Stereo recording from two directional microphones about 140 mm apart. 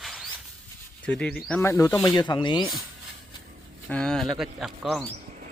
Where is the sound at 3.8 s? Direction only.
5° left (ahead or behind).